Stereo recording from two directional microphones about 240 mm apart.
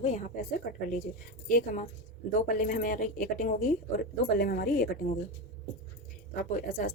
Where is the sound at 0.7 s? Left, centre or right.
Left.